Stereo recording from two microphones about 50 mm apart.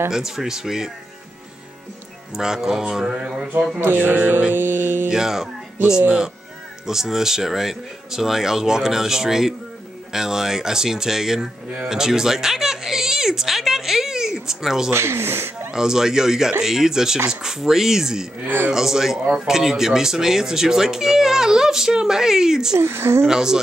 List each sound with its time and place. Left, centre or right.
0.1 s speech: centre
2.3 s speech: centre
3.2 s mantra: centre
3.8 s speech: right
5.1 s speech: centre
14.9 s speech: right
15.7 s speech: centre
18.4 s speech: right
18.7 s speech: centre
22.8 s speech: right
23.2 s speech: centre